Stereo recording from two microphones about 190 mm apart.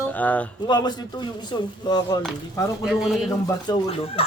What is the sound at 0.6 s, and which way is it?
Speech, 20° left (ahead or behind).